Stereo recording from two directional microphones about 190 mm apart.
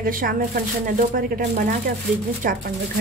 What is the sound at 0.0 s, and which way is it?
Speech, 50° right (ahead or behind).